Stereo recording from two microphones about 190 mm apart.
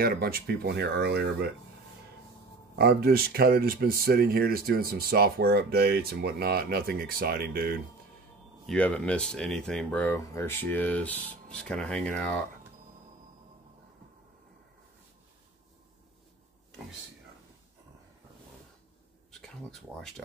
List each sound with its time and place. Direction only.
0.0 s speech: 50° right (ahead or behind)
2.7 s speech: 55° right (ahead or behind)
8.6 s speech: 5° left (ahead or behind)
19.3 s speech: centre (ahead or behind)